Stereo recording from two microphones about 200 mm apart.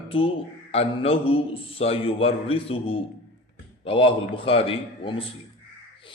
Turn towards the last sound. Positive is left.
turn(degrees=25)  # may be behind; listen again after turning